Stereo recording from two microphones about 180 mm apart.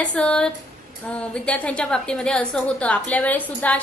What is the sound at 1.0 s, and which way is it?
A woman's voice, 5° left (ahead or behind).